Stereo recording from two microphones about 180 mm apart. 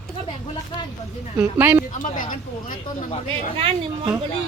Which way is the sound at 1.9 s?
45° left (ahead or behind).